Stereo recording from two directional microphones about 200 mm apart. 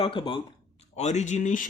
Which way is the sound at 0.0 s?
25° left (ahead or behind).